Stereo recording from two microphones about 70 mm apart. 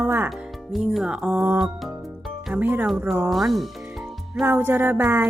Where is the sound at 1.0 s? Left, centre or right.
Centre.